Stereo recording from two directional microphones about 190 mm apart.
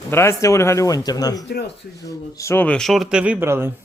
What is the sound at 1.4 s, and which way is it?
Speech, 60° left (ahead or behind).